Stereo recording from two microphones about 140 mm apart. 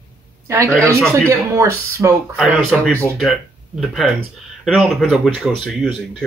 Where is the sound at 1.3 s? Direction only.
20° right (ahead or behind).